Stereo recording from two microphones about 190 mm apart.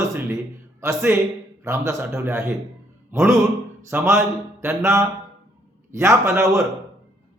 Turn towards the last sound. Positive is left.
turn(degrees=-15)  # may be behind; listen again after turning